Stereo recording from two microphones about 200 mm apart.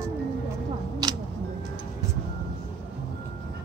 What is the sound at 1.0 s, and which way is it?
Tick, 20° right (ahead or behind).